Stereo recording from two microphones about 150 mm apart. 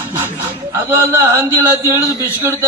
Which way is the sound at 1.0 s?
15° right (ahead or behind).